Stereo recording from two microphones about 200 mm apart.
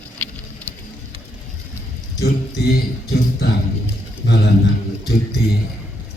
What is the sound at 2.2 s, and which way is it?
A man's voice, 55° left (ahead or behind).